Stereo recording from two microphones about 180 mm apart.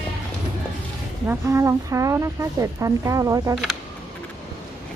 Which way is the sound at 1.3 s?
15° right (ahead or behind).